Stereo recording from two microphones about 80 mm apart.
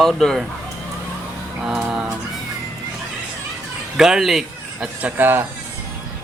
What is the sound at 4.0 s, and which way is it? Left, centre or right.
Speech, centre.